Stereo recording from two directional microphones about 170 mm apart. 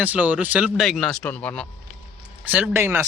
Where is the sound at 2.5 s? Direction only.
10° right (ahead or behind).